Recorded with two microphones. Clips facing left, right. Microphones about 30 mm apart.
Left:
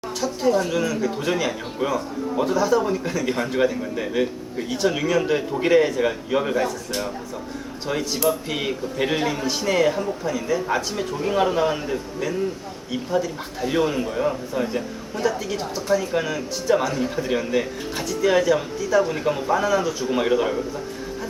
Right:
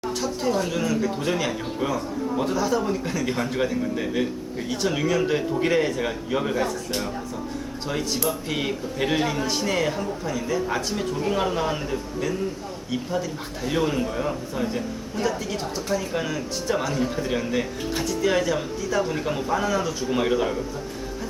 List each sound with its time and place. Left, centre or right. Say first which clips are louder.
0.2 s speech: left 5 dB; centre